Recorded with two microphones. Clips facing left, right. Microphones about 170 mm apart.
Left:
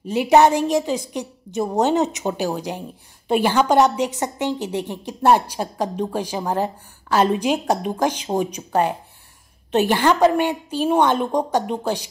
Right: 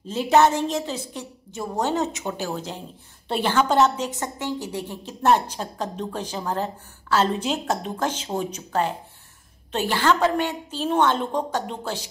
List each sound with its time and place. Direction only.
0.0 s a woman's voice: 15° left (ahead or behind)